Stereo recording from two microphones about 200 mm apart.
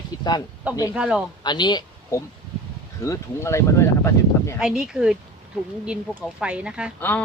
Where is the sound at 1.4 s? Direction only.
20° left (ahead or behind).